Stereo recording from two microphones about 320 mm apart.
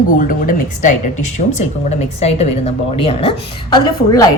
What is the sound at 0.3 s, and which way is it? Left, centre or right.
A woman's voice, left.